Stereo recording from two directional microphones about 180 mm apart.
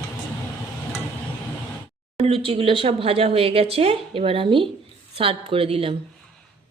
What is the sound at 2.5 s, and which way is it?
Speech, 30° right (ahead or behind).